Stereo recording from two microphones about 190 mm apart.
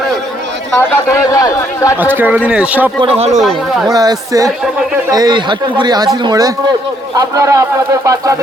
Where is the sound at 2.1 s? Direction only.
10° right (ahead or behind).